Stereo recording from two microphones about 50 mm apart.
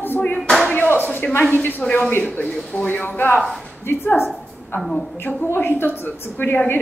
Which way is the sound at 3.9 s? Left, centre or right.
Left.